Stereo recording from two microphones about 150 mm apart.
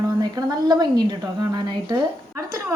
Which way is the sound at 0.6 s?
30° right (ahead or behind).